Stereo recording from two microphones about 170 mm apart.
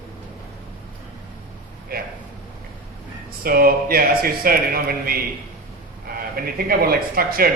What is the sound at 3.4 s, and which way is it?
A man's voice, 60° right (ahead or behind).